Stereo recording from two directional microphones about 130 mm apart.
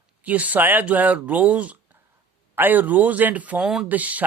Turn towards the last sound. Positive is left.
turn(degrees=-10)  # may be behind; listen again after turning